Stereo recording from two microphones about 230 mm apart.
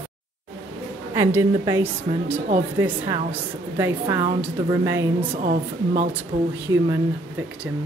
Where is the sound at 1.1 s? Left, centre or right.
Centre.